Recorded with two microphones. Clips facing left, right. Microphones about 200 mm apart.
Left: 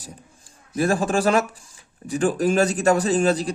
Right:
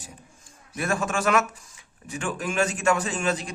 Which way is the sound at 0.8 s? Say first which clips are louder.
Left 6 dB; 35° left (ahead or behind).